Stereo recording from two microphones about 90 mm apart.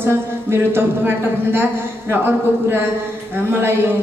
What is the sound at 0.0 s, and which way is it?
Speech, 25° right (ahead or behind).